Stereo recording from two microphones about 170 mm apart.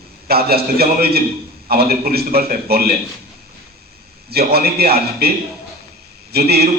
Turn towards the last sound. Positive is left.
turn(degrees=-70)  # may be behind; listen again after turning